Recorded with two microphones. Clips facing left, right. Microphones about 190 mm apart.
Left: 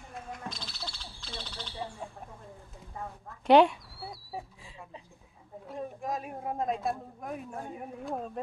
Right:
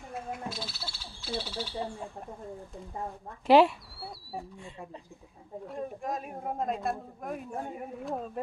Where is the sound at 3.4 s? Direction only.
Centre (ahead or behind).